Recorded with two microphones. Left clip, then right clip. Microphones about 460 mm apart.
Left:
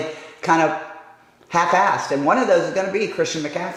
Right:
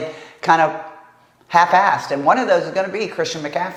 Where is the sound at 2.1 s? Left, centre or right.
Right.